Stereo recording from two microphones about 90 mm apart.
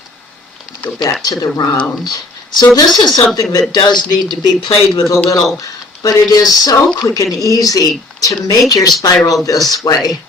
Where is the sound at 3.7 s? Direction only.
55° left (ahead or behind).